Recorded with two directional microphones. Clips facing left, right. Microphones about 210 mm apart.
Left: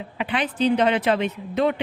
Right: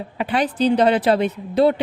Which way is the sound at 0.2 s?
40° right (ahead or behind).